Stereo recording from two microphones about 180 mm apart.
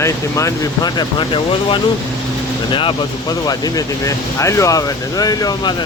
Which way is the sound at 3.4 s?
20° left (ahead or behind).